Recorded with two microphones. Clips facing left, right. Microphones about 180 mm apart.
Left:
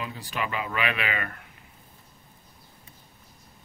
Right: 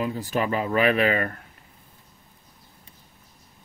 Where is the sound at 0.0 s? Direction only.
40° right (ahead or behind).